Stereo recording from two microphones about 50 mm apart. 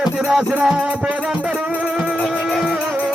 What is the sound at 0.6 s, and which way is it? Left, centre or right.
Music, centre.